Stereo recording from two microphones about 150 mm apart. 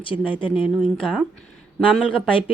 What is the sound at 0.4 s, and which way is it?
Speech, 10° right (ahead or behind).